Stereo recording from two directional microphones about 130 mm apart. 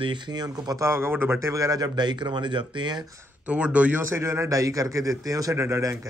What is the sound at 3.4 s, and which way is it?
Speech, 10° right (ahead or behind).